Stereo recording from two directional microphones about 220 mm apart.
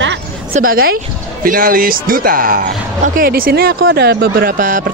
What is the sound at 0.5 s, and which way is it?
Speech, 40° right (ahead or behind).